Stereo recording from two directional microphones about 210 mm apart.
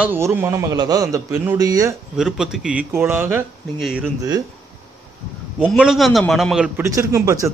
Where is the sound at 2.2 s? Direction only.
5° right (ahead or behind).